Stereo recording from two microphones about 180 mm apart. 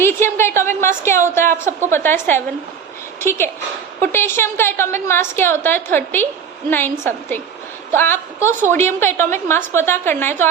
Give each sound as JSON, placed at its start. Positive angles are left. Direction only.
{"t": 0.0, "sound": "a woman's voice", "side_deg": 15}